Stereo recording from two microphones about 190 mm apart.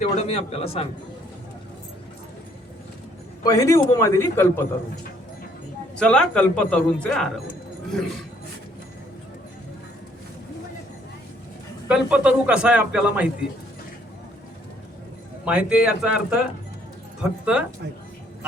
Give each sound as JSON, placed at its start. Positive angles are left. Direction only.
{"t": 0.0, "sound": "a man's voice", "side_deg": 35}
{"t": 3.4, "sound": "a man's voice", "side_deg": 15}
{"t": 6.0, "sound": "a man's voice", "side_deg": 5}
{"t": 11.9, "sound": "a man's voice", "side_deg": -5}
{"t": 15.4, "sound": "a man's voice", "side_deg": -5}
{"t": 17.4, "sound": "speech", "side_deg": -5}